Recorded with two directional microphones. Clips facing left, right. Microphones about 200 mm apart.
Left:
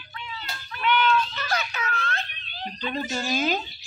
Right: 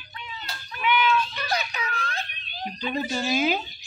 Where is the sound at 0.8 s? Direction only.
10° right (ahead or behind).